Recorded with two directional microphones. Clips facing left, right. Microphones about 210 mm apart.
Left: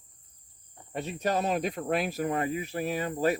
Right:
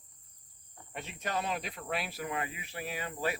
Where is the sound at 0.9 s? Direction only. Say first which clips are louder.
Left 8 dB; 40° left (ahead or behind).